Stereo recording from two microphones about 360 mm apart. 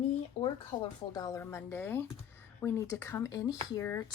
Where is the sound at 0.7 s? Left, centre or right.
Left.